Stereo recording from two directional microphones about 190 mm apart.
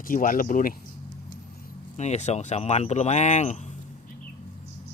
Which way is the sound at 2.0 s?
35° left (ahead or behind).